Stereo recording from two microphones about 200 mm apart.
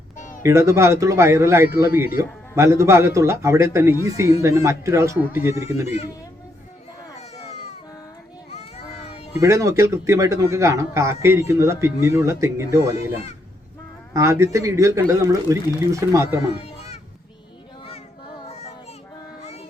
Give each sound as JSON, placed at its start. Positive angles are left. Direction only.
{"t": 0.2, "sound": "a sound", "side_deg": 40}
{"t": 0.4, "sound": "speech", "side_deg": -15}
{"t": 7.2, "sound": "baby cry", "side_deg": 30}
{"t": 9.0, "sound": "cat", "side_deg": 30}
{"t": 9.4, "sound": "speech", "side_deg": -15}
{"t": 14.1, "sound": "speech", "side_deg": -15}
{"t": 16.6, "sound": "children playing", "side_deg": 30}
{"t": 18.4, "sound": "child singing", "side_deg": 35}